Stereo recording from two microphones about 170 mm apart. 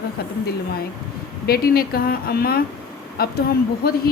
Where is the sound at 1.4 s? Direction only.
65° left (ahead or behind).